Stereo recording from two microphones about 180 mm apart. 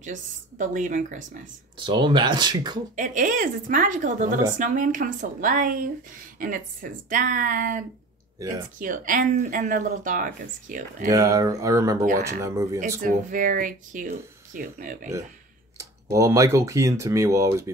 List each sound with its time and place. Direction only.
0.0 s speech: 45° right (ahead or behind)
1.8 s speech: 25° right (ahead or behind)
3.0 s speech: 45° right (ahead or behind)
11.1 s speech: 20° right (ahead or behind)
12.1 s speech: 65° right (ahead or behind)
12.4 s speech: 15° right (ahead or behind)
13.0 s speech: 50° right (ahead or behind)
16.1 s speech: 15° right (ahead or behind)